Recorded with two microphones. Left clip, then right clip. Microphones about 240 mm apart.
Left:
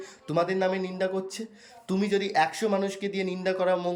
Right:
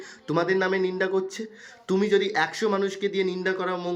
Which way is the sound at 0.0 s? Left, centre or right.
Centre.